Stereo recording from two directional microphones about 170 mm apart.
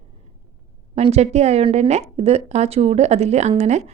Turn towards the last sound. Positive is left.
turn(degrees=-40)  # may be behind; listen again after turning